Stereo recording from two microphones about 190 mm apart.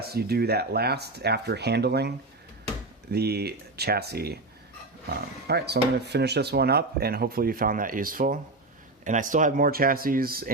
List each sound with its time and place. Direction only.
0.0 s speech: 55° right (ahead or behind)
5.5 s speech: 60° right (ahead or behind)